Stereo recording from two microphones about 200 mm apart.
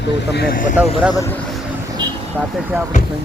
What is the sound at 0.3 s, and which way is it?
Speech, 45° left (ahead or behind).